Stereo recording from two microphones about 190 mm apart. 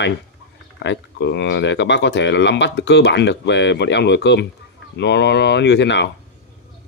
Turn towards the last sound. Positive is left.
turn(degrees=65)  # may be behind; listen again after turning